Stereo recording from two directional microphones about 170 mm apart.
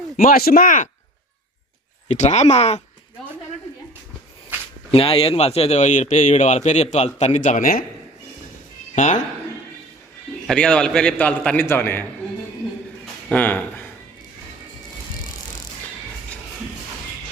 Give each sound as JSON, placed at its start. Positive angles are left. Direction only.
{"t": 0.2, "sound": "speech", "side_deg": 60}
{"t": 2.0, "sound": "a man's voice", "side_deg": 40}
{"t": 4.5, "sound": "a sound", "side_deg": -10}
{"t": 4.9, "sound": "a man's voice", "side_deg": 35}
{"t": 9.0, "sound": "speech", "side_deg": 45}
{"t": 10.4, "sound": "a man's voice", "side_deg": 5}
{"t": 13.3, "sound": "speech", "side_deg": 10}